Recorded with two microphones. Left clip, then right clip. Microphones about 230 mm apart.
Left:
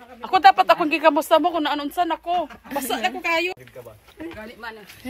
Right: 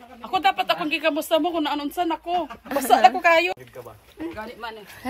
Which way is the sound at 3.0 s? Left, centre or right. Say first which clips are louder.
Right 9 dB; right.